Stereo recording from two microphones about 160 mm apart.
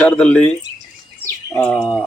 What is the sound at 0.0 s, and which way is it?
Speech, 10° left (ahead or behind).